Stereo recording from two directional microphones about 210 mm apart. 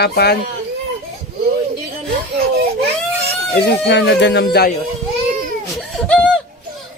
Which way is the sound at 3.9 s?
55° left (ahead or behind).